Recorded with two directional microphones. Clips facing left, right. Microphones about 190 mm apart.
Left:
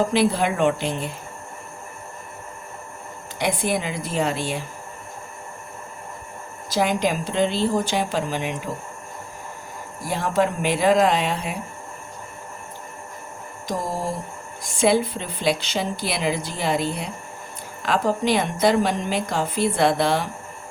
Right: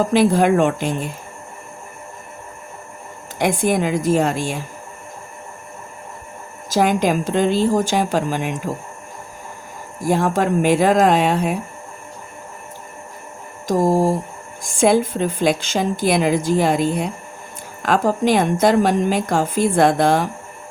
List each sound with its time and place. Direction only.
0.1 s a woman's voice: 45° right (ahead or behind)
3.3 s a woman's voice: 50° right (ahead or behind)
6.7 s a woman's voice: 45° right (ahead or behind)
10.1 s a woman's voice: 50° right (ahead or behind)
13.7 s a woman's voice: 45° right (ahead or behind)